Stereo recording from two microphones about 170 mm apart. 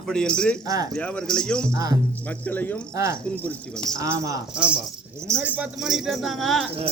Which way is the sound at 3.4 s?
10° left (ahead or behind).